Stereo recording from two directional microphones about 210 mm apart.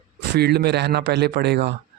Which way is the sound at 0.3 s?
50° right (ahead or behind).